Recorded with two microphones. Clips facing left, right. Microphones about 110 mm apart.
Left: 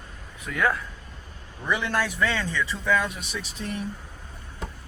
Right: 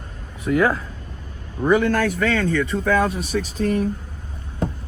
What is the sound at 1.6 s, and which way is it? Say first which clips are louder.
Speech: right 9 dB; 45° right (ahead or behind).